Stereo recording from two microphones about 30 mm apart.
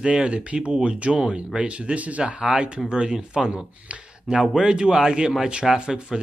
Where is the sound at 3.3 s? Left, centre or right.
Centre.